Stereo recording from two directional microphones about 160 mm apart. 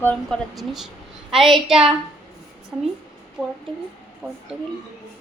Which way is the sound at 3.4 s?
Centre (ahead or behind).